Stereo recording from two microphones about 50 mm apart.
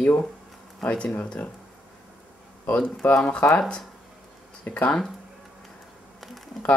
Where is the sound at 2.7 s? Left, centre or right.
Left.